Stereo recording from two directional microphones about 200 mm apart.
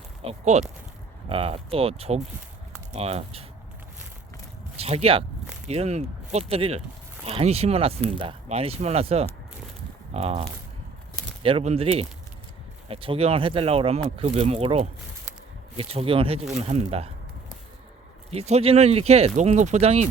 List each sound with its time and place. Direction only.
0.2 s speech: 30° right (ahead or behind)
4.8 s speech: 30° right (ahead or behind)
18.3 s speech: 30° right (ahead or behind)